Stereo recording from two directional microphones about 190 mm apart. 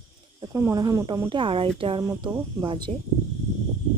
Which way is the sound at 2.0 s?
15° right (ahead or behind).